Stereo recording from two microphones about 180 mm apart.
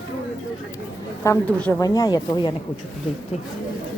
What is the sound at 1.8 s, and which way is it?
Speech, 20° left (ahead or behind).